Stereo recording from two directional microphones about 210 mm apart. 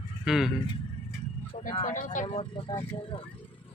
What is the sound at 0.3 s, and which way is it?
Speech, centre (ahead or behind).